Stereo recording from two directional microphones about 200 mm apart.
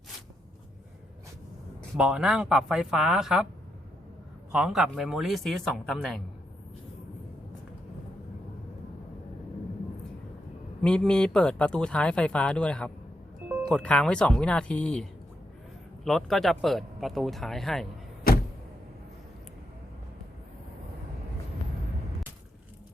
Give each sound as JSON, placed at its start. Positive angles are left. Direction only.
{"t": 2.0, "sound": "speech", "side_deg": -5}
{"t": 4.5, "sound": "speech", "side_deg": -5}
{"t": 10.8, "sound": "speech", "side_deg": 5}
{"t": 16.0, "sound": "speech", "side_deg": 0}
{"t": 18.3, "sound": "a sound", "side_deg": 45}